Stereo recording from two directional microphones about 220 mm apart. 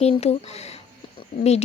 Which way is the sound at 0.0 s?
30° left (ahead or behind).